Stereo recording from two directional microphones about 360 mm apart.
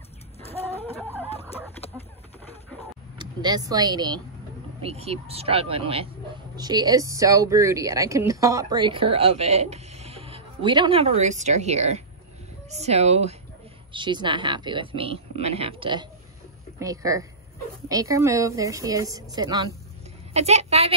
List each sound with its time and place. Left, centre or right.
0.4 s chicken: centre
3.2 s speech: centre